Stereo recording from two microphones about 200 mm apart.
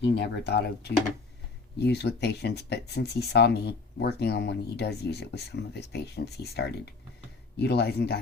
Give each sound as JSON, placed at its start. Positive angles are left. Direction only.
{"t": 0.0, "sound": "speech", "side_deg": 55}